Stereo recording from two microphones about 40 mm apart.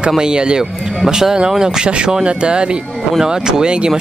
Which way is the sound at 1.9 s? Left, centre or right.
Right.